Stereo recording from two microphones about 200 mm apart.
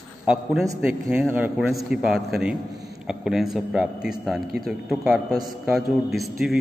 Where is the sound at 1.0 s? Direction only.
10° right (ahead or behind).